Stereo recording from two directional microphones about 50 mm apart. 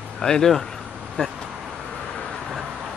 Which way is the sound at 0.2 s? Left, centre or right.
Centre.